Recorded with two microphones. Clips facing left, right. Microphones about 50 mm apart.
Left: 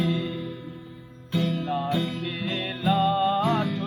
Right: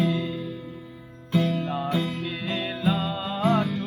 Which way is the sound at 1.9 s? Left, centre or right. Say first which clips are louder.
Even; right.